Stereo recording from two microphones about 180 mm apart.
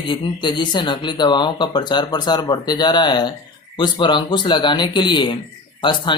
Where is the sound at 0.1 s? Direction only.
25° left (ahead or behind).